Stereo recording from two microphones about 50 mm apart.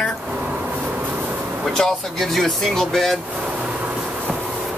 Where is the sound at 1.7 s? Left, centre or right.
Centre.